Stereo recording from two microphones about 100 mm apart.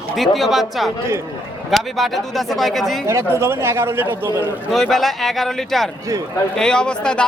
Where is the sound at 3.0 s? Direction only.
25° right (ahead or behind).